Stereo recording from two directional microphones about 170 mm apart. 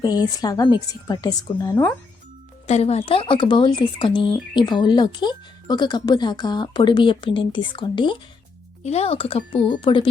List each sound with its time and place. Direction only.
0.0 s speech: 20° left (ahead or behind)
2.6 s speech: 40° left (ahead or behind)
8.8 s speech: 40° left (ahead or behind)